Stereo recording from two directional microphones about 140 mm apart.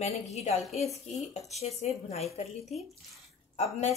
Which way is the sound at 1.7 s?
50° left (ahead or behind).